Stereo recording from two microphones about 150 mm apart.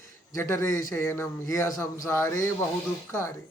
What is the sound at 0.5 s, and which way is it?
A man's voice, 20° left (ahead or behind).